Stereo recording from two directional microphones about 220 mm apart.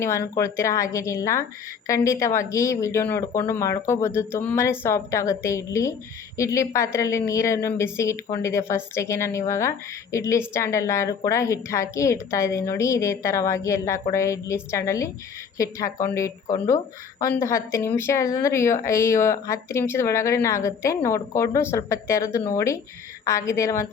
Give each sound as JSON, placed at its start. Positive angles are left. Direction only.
{"t": 0.3, "sound": "speech", "side_deg": 15}